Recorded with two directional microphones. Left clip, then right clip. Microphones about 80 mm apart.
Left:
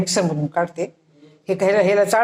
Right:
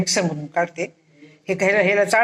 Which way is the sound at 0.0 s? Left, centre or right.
Left.